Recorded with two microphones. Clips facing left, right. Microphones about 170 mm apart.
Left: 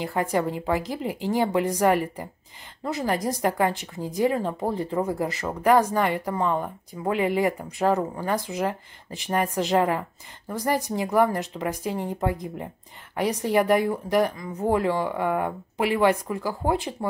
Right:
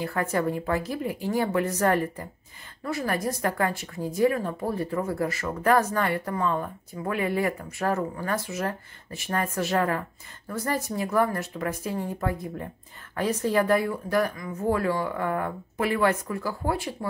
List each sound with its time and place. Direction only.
0.0 s a woman's voice: 20° left (ahead or behind)